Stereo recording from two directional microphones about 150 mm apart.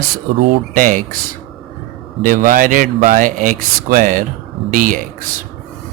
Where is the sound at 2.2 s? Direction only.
65° right (ahead or behind).